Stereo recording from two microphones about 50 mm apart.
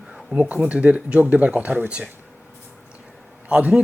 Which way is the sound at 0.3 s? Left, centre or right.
Right.